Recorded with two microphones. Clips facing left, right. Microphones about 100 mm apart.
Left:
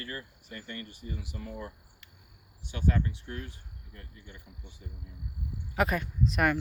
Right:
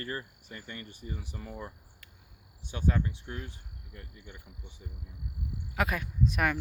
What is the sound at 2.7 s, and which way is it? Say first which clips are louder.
Speech: left 1 dB; 20° right (ahead or behind).